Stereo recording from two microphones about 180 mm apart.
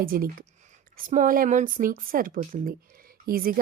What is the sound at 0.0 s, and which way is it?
A woman's voice, 55° right (ahead or behind).